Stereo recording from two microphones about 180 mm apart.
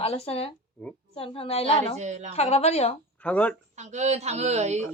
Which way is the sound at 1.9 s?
40° right (ahead or behind).